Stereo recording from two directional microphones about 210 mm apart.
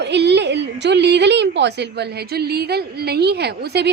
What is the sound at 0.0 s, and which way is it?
A woman's voice, 55° right (ahead or behind).